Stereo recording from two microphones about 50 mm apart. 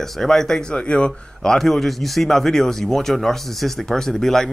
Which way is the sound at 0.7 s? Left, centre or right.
Left.